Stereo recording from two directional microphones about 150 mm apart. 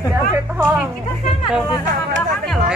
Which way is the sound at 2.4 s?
Centre (ahead or behind).